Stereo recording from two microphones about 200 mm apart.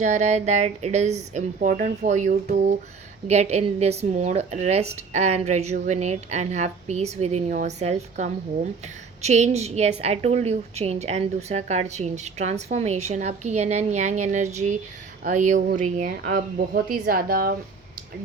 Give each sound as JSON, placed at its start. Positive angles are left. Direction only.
{"t": 0.0, "sound": "a woman's voice", "side_deg": -35}